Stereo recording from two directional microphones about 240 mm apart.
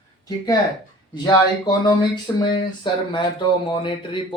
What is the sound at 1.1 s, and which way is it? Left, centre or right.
Speech, centre.